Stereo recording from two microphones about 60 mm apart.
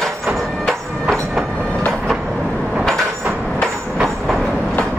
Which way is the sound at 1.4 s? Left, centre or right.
Centre.